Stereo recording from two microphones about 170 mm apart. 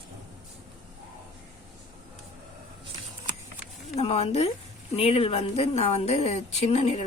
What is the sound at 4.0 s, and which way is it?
A woman's voice, 35° left (ahead or behind).